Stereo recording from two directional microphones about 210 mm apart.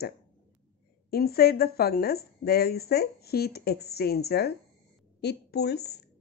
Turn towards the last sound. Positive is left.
turn(degrees=50)  # may be behind; listen again after turning